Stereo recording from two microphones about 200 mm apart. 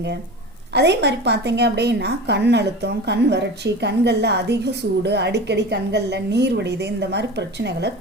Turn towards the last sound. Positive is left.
turn(degrees=-60)  # may be behind; listen again after turning